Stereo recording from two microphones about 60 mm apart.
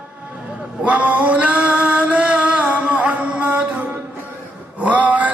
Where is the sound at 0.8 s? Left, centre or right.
Right.